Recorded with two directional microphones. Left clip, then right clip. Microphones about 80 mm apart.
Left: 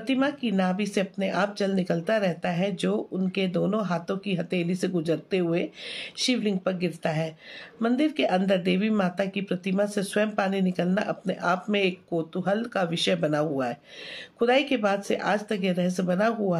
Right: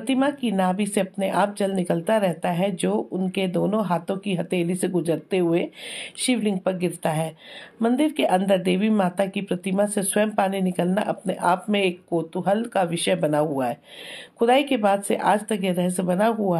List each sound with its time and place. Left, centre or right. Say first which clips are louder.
0.0 s speech: right 3 dB; right